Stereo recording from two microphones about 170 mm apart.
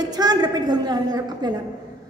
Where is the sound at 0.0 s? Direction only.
25° right (ahead or behind).